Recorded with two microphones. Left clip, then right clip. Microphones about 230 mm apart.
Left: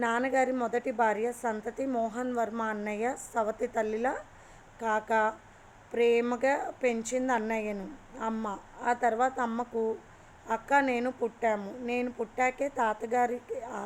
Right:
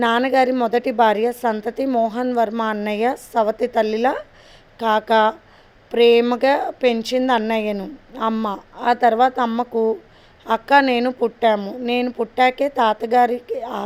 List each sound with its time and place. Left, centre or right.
0.0 s a woman's voice: right
8.4 s a woman's voice: right